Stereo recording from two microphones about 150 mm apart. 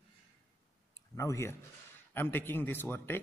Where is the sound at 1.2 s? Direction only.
20° left (ahead or behind).